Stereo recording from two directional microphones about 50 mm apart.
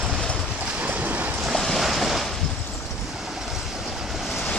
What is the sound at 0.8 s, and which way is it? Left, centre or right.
Train, right.